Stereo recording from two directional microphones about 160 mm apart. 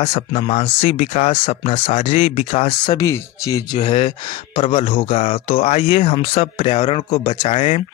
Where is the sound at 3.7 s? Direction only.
40° left (ahead or behind).